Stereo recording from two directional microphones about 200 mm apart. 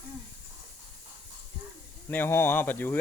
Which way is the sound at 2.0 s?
10° left (ahead or behind).